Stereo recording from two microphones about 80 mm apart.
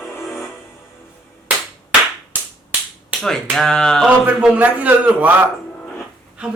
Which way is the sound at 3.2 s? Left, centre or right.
Centre.